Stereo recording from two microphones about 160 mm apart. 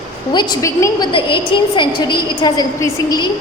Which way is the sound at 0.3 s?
25° left (ahead or behind).